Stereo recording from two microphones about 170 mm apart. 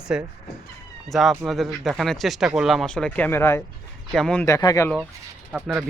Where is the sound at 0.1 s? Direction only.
5° right (ahead or behind).